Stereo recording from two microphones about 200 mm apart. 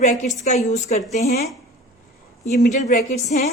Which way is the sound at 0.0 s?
35° left (ahead or behind).